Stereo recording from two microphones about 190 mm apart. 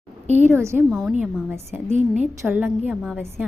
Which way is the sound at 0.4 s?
15° right (ahead or behind).